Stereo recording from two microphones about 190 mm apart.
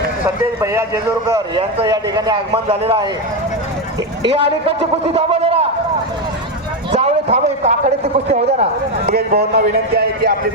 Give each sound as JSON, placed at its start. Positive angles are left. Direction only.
{"t": 0.6, "sound": "a man's voice", "side_deg": -15}
{"t": 4.6, "sound": "a man's voice", "side_deg": -35}
{"t": 6.9, "sound": "a man's voice", "side_deg": -35}
{"t": 9.0, "sound": "a man's voice", "side_deg": -55}